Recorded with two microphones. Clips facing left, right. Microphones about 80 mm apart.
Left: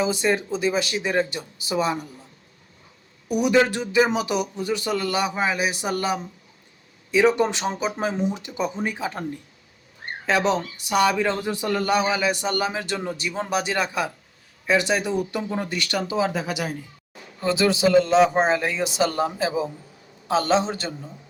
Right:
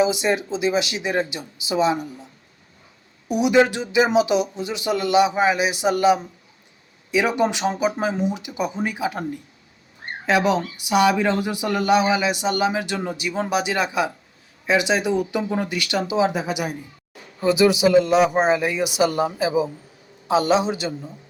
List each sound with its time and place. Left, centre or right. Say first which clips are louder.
0.0 s speech: right 3 dB; centre
3.3 s speech: right 2 dB; centre
10.2 s speech: right 2 dB; centre